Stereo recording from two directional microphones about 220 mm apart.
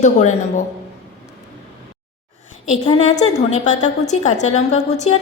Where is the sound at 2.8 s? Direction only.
25° left (ahead or behind).